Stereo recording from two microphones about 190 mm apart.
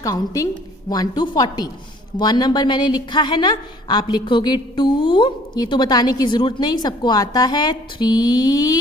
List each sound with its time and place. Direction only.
0.0 s a woman's voice: 20° left (ahead or behind)